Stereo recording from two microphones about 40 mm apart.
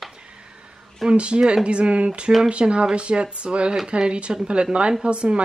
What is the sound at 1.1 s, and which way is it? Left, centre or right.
Speech, right.